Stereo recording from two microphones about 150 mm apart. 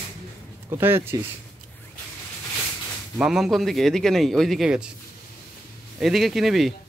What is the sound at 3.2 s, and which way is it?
A man's voice, centre (ahead or behind).